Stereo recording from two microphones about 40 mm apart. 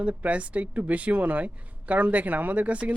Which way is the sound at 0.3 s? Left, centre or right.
Right.